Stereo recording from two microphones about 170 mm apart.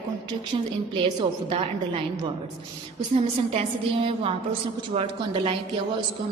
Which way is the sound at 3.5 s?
35° right (ahead or behind).